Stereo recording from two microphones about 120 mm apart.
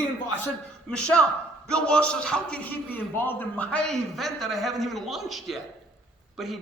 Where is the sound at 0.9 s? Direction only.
10° left (ahead or behind).